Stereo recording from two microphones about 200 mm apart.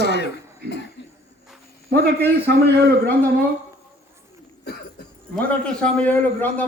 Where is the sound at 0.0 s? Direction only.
55° left (ahead or behind).